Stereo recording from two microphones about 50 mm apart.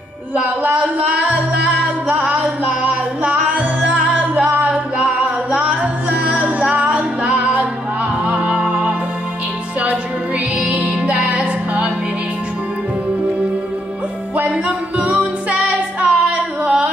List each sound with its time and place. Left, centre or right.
0.7 s music: right
10.7 s music: right
15.0 s female singing: right